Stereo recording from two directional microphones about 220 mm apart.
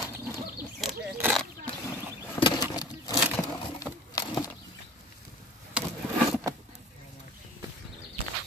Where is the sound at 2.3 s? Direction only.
20° left (ahead or behind).